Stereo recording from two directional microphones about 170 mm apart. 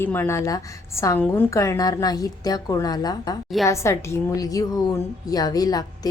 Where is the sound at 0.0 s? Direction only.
10° left (ahead or behind).